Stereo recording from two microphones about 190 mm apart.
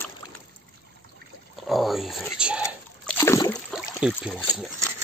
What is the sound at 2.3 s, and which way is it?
Speech, 5° right (ahead or behind).